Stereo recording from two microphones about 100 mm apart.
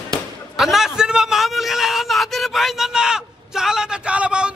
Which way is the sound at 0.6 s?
5° right (ahead or behind).